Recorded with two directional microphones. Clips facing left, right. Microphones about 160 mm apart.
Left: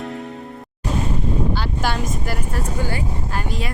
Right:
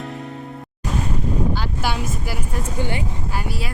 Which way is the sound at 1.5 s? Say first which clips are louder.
Left 1 dB; 10° right (ahead or behind).